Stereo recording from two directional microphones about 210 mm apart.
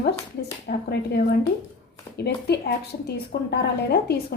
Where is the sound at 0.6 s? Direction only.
50° left (ahead or behind).